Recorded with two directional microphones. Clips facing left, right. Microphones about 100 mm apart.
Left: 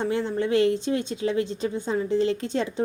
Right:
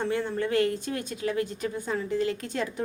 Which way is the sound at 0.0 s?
20° left (ahead or behind).